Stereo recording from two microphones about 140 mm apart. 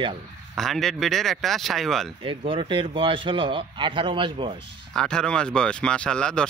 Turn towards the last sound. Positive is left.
turn(degrees=5)  # may be behind; listen again after turning